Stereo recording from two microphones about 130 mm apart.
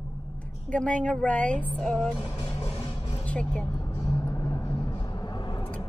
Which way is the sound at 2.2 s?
30° left (ahead or behind).